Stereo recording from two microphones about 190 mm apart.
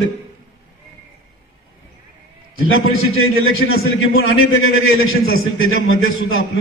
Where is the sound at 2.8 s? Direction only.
90° left.